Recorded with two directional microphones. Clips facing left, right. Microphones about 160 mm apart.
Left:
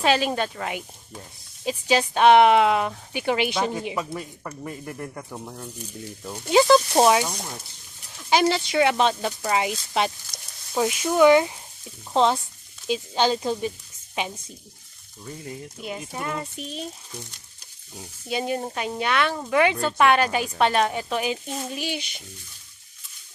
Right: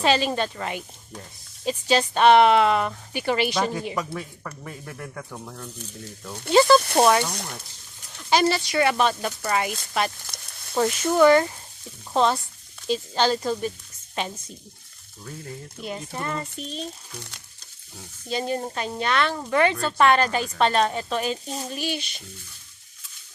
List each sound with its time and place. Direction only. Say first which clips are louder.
0.0 s speech: even; 5° left (ahead or behind)
3.8 s speech: even; 5° left (ahead or behind)
10.8 s speech: even; 5° left (ahead or behind)
15.8 s speech: right 1 dB; 5° left (ahead or behind)
17.9 s speech: even; 10° left (ahead or behind)